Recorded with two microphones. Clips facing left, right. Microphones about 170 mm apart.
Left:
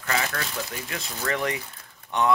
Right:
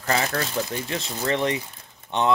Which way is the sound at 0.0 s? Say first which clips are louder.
Right 4 dB; 35° right (ahead or behind).